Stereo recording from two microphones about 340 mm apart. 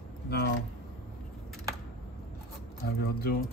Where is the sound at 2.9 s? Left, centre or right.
Left.